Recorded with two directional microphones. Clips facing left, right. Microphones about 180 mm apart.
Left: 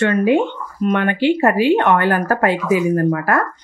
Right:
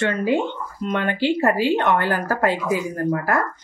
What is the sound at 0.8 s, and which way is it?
Speech, 60° left (ahead or behind).